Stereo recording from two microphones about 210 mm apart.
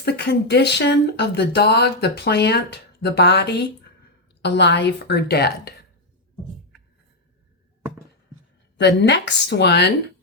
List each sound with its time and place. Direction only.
0.0 s speech: 50° left (ahead or behind)
8.8 s speech: 55° left (ahead or behind)